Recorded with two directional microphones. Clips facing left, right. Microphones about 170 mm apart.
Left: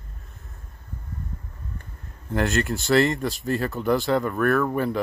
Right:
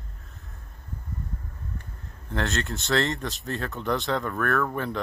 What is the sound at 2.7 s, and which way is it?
Speech, centre (ahead or behind).